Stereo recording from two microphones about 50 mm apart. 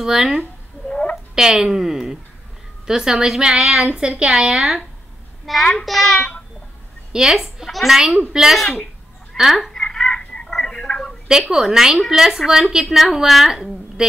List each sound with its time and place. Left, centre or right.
0.0 s a woman's voice: centre
0.8 s a sound: centre
1.1 s a woman's voice: centre
3.9 s a woman's voice: centre
4.3 s a woman's voice: centre
7.1 s a woman's voice: centre
9.7 s a sound: centre
11.5 s a woman's voice: centre